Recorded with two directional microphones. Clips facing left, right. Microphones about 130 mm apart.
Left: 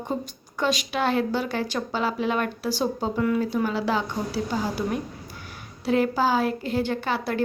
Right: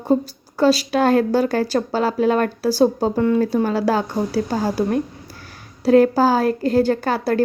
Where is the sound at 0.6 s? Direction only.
35° right (ahead or behind).